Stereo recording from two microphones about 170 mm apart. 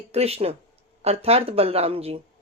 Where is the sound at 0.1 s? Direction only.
35° right (ahead or behind).